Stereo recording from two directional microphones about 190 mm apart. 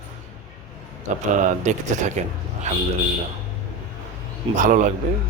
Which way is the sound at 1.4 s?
40° right (ahead or behind).